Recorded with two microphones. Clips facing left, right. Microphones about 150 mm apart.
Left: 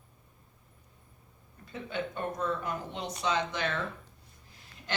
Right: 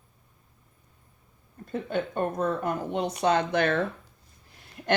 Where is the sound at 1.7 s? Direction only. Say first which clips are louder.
Right 6 dB; 50° right (ahead or behind).